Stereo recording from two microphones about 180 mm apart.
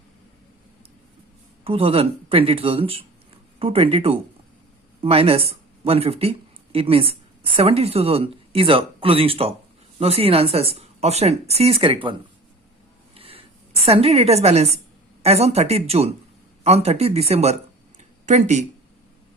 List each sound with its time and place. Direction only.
1.6 s a woman's voice: 30° right (ahead or behind)
13.1 s a sound: 30° right (ahead or behind)
13.8 s a woman's voice: 35° right (ahead or behind)